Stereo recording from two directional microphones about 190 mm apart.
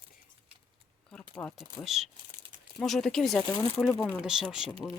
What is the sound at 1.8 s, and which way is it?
Speech, centre (ahead or behind).